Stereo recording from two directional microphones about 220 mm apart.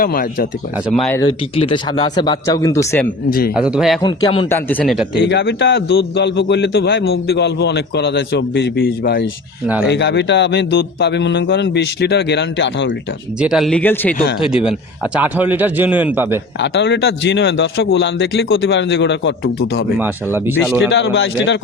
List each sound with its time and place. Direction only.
0.0 s speech: 40° left (ahead or behind)
1.1 s speech: 20° left (ahead or behind)
3.2 s speech: 40° left (ahead or behind)
3.6 s speech: 5° right (ahead or behind)
4.0 s speech: 20° left (ahead or behind)
4.4 s speech: 10° left (ahead or behind)
5.2 s a man's voice: 50° left (ahead or behind)
13.4 s speech: centre (ahead or behind)
14.4 s a man's voice: 5° right (ahead or behind)
16.6 s a man's voice: 55° left (ahead or behind)
20.0 s a man's voice: 10° right (ahead or behind)
20.9 s a man's voice: 55° left (ahead or behind)